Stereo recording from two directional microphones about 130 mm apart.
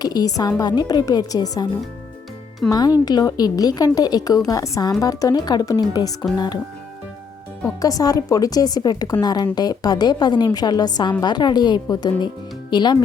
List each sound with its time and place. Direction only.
0.0 s a woman's voice: 30° left (ahead or behind)
7.8 s a woman's voice: 25° left (ahead or behind)